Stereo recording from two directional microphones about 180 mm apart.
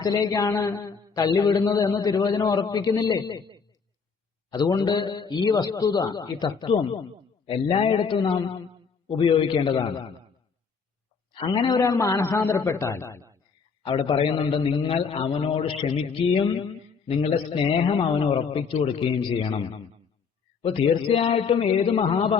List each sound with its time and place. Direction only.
0.0 s a man's voice: 20° left (ahead or behind)
4.5 s a man's voice: 25° left (ahead or behind)
11.3 s a man's voice: 25° left (ahead or behind)
13.8 s a man's voice: 30° left (ahead or behind)